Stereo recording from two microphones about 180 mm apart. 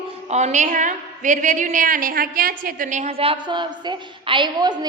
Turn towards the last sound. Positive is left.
turn(degrees=-25)  # may be behind; listen again after turning